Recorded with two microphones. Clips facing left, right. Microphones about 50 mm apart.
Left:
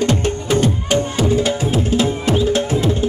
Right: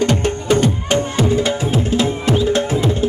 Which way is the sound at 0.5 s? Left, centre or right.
Right.